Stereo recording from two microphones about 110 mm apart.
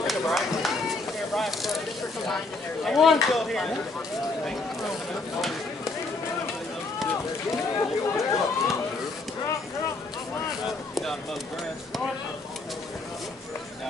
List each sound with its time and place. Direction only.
0.0 s a sound: centre (ahead or behind)
2.8 s speech: centre (ahead or behind)
7.7 s speech: 30° left (ahead or behind)